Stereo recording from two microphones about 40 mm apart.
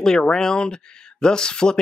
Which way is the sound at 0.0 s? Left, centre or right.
Centre.